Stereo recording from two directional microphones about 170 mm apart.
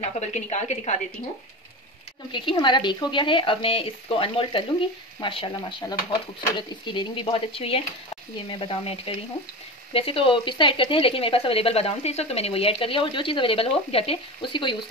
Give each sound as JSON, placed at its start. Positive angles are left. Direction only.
{"t": 0.2, "sound": "speech", "side_deg": 40}
{"t": 2.3, "sound": "speech", "side_deg": 30}